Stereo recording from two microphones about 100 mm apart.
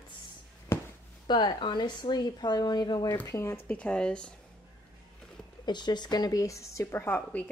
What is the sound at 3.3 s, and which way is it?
Speech, 30° left (ahead or behind).